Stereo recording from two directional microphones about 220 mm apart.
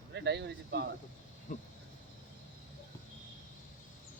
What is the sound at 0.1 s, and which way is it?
Speech, 50° right (ahead or behind).